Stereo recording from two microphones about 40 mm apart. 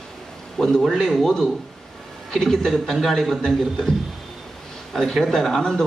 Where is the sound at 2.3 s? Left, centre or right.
Centre.